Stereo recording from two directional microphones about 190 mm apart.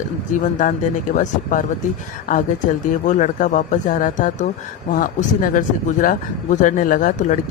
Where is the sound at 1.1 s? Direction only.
45° left (ahead or behind).